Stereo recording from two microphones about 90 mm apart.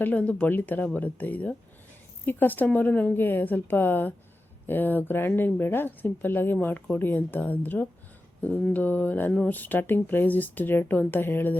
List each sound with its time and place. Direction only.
0.0 s speech: 15° left (ahead or behind)
0.9 s mantra: 20° left (ahead or behind)
2.2 s speech: 20° left (ahead or behind)
8.7 s mantra: 20° left (ahead or behind)
9.5 s speech: 20° left (ahead or behind)